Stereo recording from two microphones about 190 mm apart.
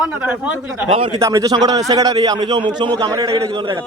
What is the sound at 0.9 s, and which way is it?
Speech, 30° right (ahead or behind).